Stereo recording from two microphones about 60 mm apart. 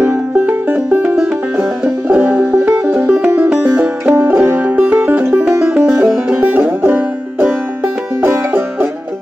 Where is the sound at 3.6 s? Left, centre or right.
Right.